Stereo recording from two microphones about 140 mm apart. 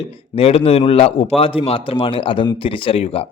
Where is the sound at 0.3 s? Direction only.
45° left (ahead or behind).